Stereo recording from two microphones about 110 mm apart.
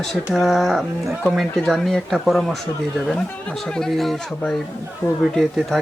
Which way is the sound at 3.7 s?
5° left (ahead or behind).